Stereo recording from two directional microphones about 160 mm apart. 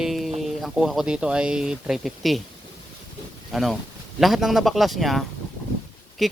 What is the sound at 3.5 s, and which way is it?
Speech, centre (ahead or behind).